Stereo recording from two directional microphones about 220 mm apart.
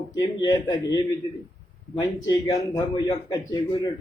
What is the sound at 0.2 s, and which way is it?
A man's voice, 20° left (ahead or behind).